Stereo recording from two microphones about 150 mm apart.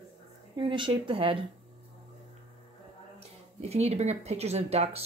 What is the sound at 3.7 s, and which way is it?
Speech, 45° right (ahead or behind).